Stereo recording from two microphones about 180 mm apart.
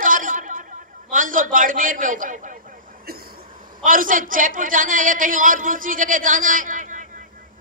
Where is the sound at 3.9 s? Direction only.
50° right (ahead or behind).